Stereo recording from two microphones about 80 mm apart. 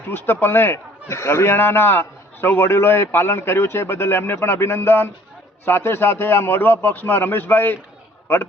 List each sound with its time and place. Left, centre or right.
0.1 s a man's voice: left